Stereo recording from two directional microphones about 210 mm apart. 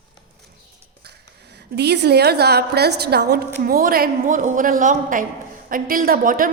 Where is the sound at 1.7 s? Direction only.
50° right (ahead or behind).